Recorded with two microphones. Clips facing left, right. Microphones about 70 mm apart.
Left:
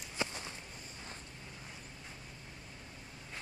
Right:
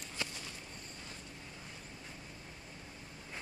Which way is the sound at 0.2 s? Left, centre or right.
Left.